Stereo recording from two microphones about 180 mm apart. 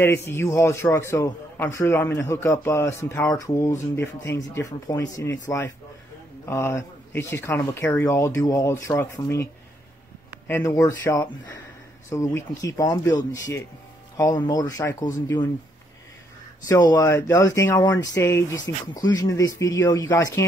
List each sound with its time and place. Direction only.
0.0 s a man's voice: 10° left (ahead or behind)
6.4 s a man's voice: 15° left (ahead or behind)
16.6 s a man's voice: 20° left (ahead or behind)